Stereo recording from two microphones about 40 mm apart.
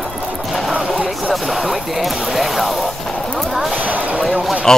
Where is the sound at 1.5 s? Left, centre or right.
Centre.